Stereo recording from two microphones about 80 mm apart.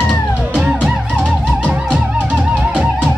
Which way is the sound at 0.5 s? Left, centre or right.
Centre.